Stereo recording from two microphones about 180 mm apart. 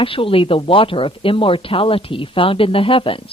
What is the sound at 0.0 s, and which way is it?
Speech, 30° left (ahead or behind).